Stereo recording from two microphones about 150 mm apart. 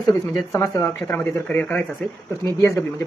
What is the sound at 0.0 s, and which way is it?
Speech, 20° left (ahead or behind).